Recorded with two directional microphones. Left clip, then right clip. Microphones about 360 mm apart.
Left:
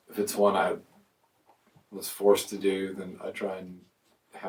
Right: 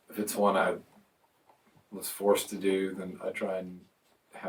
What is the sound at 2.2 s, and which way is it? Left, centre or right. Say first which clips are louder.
Speech: left 4 dB; centre.